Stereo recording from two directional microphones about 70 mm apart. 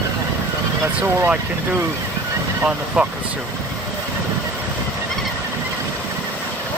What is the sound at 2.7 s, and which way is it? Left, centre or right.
Speech, centre.